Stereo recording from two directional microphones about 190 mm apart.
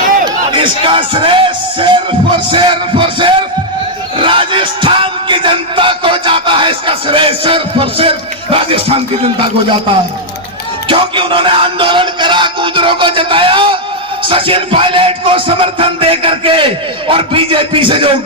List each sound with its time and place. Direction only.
0.5 s crowd: 25° right (ahead or behind)
2.5 s a man's voice: 25° right (ahead or behind)
4.2 s music: 25° right (ahead or behind)
10.8 s music: 25° right (ahead or behind)
17.1 s a man's voice: 30° right (ahead or behind)